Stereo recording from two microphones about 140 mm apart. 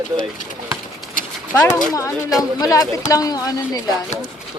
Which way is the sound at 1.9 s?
25° left (ahead or behind).